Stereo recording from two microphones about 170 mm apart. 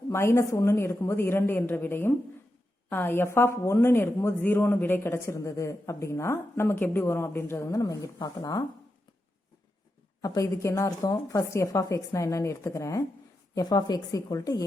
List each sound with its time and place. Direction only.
0.1 s a woman's voice: 15° left (ahead or behind)
10.2 s a woman's voice: 20° left (ahead or behind)